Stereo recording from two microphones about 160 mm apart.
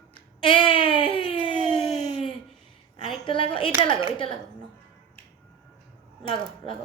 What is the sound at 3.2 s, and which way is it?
Speech, 35° left (ahead or behind).